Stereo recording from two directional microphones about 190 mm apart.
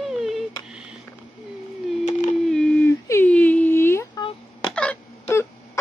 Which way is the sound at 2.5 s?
5° left (ahead or behind).